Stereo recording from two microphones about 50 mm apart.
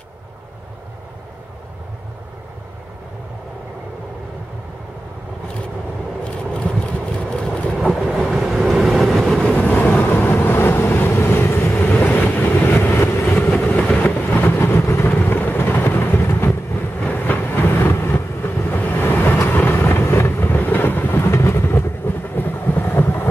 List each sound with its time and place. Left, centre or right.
6.2 s vehicle: left
7.9 s boat: centre
8.6 s vehicle: centre
9.2 s vehicle: centre
9.6 s vehicle: left
11.9 s train: left
12.9 s vehicle: left
13.8 s vehicle: left
14.2 s vehicle: left
15.0 s vehicle: left
17.0 s vehicle: left
20.3 s vehicle: left